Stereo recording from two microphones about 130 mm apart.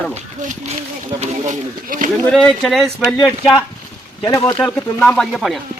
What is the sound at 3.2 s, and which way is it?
Speech, 35° left (ahead or behind).